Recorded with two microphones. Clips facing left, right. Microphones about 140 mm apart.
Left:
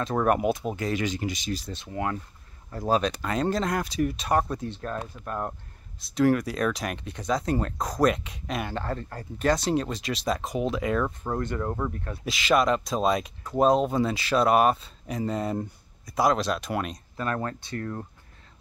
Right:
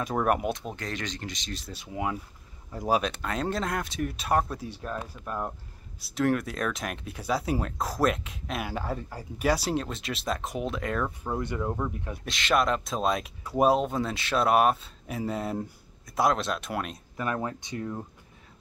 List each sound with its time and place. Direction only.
0.0 s speech: 5° right (ahead or behind)
1.7 s speech: 5° right (ahead or behind)
3.0 s speech: centre (ahead or behind)
11.9 s speech: 15° right (ahead or behind)
12.3 s speech: centre (ahead or behind)
17.2 s speech: 15° right (ahead or behind)